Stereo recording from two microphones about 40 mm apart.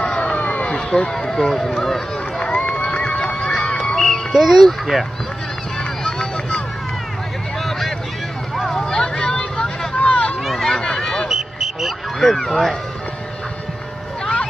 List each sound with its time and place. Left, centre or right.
0.0 s a sound: left
0.7 s speech: centre
2.7 s run: left
3.0 s a sound: left
3.3 s honk: left
3.8 s music: centre
4.3 s speech: centre
6.0 s vehicle: left
8.5 s vehicle: centre
9.4 s vehicle: left
10.6 s run: centre
11.2 s a sound: centre
12.3 s speech: centre